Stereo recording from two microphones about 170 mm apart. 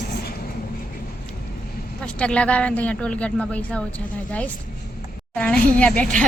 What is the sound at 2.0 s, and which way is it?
Speech, 5° left (ahead or behind).